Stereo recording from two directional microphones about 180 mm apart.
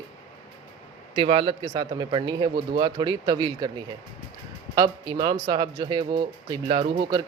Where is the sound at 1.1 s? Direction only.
30° right (ahead or behind).